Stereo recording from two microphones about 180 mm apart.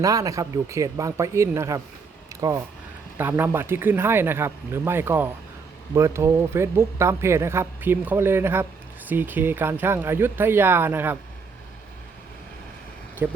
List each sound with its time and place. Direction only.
0.0 s speech: 20° right (ahead or behind)
2.3 s a sound: 15° right (ahead or behind)
3.2 s speech: 10° right (ahead or behind)
13.2 s speech: 10° right (ahead or behind)